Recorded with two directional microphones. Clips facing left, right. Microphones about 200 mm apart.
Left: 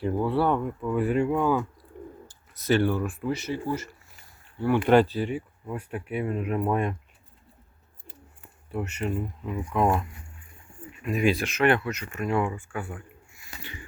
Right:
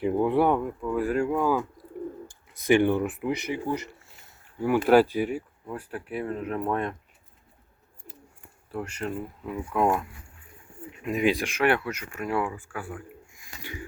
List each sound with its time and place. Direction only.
0.0 s speech: 20° right (ahead or behind)
0.6 s speech: centre (ahead or behind)
2.6 s speech: 15° right (ahead or behind)
6.1 s speech: 5° left (ahead or behind)
8.7 s speech: 5° left (ahead or behind)
11.0 s speech: 15° right (ahead or behind); by 13.0 s centre (ahead or behind)
13.6 s wheeze: 10° right (ahead or behind)